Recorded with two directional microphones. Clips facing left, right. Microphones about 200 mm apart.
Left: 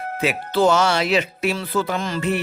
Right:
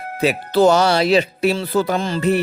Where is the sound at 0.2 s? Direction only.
40° right (ahead or behind).